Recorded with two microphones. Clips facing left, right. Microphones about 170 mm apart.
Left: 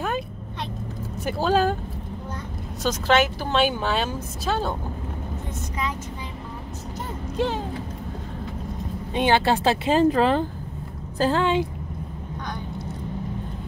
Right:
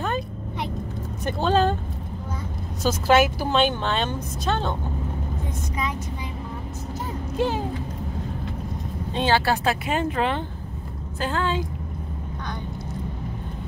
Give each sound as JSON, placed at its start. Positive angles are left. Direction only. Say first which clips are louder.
{"t": 1.2, "sound": "speech", "louder": "even", "side_deg": 5}
{"t": 2.8, "sound": "speech", "louder": "right 2 dB", "side_deg": -5}
{"t": 3.5, "sound": "speech", "louder": "left 1 dB", "side_deg": 5}
{"t": 7.3, "sound": "speech", "louder": "right 1 dB", "side_deg": -5}
{"t": 9.1, "sound": "a woman's voice", "louder": "left 2 dB", "side_deg": 20}